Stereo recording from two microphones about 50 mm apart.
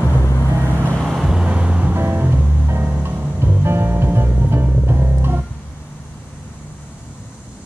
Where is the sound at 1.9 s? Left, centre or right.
Right.